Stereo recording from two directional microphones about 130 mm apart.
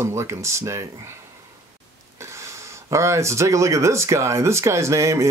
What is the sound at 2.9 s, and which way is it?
Speech, 20° right (ahead or behind).